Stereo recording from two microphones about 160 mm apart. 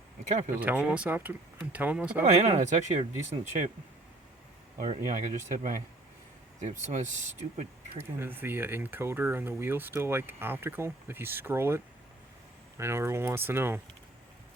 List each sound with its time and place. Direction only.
0.3 s speech: 50° right (ahead or behind)
0.5 s speech: 10° right (ahead or behind)
2.4 s speech: 45° right (ahead or behind)
4.9 s speech: 50° right (ahead or behind)
6.6 s speech: 45° right (ahead or behind)
8.2 s speech: 15° right (ahead or behind)